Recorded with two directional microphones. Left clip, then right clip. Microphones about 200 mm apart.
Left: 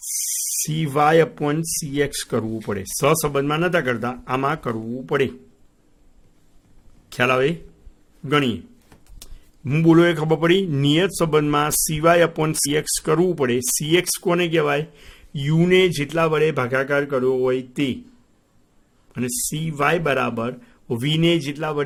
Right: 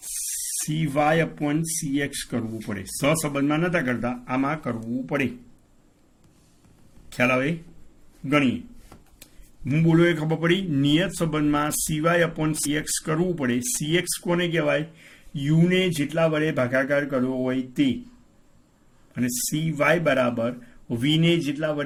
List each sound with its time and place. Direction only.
0.7 s speech: 60° left (ahead or behind)
7.1 s speech: 60° left (ahead or behind)
9.6 s speech: 60° left (ahead or behind)
19.1 s a man's voice: 50° left (ahead or behind)